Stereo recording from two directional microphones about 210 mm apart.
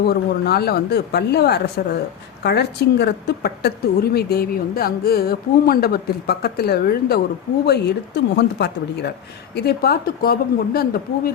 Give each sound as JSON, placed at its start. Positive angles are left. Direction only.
{"t": 0.1, "sound": "speech", "side_deg": 50}